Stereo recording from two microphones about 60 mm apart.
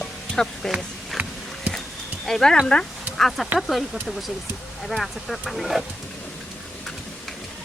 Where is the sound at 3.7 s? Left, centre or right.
Centre.